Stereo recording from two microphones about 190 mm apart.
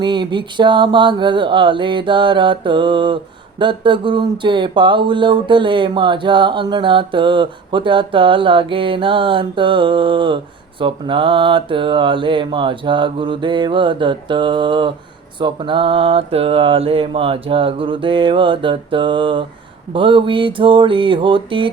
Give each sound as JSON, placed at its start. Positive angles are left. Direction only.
{"t": 0.0, "sound": "speech", "side_deg": -25}